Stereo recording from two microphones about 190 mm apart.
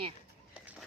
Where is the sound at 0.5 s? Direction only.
5° right (ahead or behind).